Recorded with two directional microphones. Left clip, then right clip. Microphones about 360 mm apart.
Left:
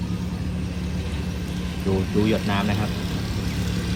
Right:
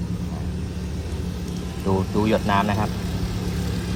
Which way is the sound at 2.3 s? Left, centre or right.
Centre.